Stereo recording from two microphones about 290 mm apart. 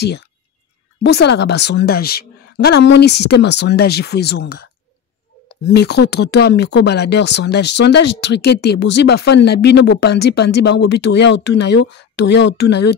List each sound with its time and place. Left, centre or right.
1.0 s speech: left
5.8 s speech: left